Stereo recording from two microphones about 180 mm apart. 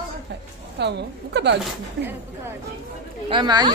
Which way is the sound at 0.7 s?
70° right (ahead or behind).